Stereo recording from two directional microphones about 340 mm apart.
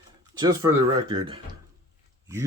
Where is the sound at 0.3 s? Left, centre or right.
Centre.